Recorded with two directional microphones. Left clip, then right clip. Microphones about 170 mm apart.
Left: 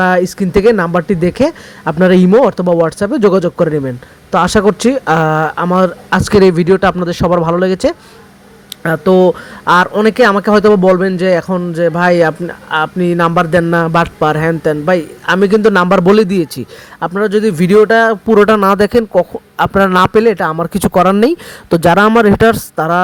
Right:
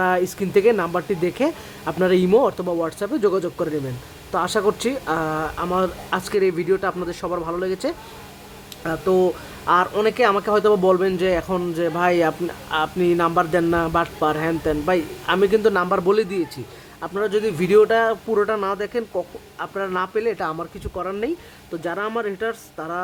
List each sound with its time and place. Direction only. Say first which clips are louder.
0.0 s speech: left 8 dB; 30° left (ahead or behind)
20.7 s speech: left 18 dB; 60° left (ahead or behind)